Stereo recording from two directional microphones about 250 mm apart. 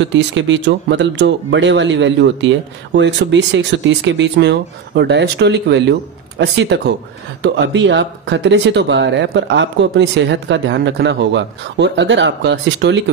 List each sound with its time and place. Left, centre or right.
0.0 s speech: right